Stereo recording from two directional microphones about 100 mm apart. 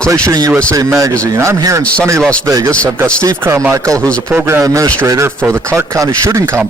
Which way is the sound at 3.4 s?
25° right (ahead or behind).